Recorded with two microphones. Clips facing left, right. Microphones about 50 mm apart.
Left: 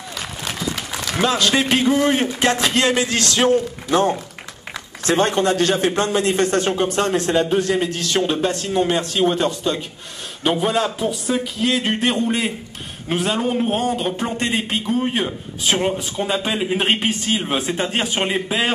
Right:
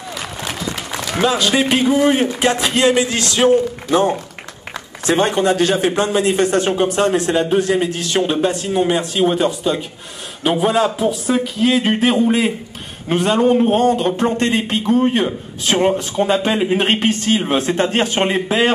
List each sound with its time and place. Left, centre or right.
1.0 s a man's voice: centre
17.6 s speech: centre
18.2 s a man's voice: centre